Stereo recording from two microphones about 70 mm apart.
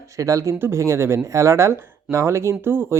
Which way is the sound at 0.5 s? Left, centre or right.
Right.